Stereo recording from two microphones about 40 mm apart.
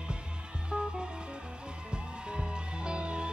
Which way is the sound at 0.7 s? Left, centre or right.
Centre.